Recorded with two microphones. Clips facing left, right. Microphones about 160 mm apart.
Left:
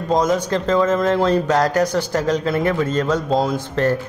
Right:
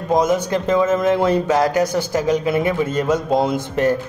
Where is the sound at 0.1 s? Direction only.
10° right (ahead or behind).